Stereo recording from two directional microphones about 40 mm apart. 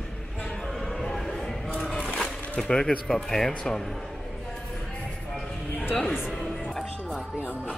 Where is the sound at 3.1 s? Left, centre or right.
Centre.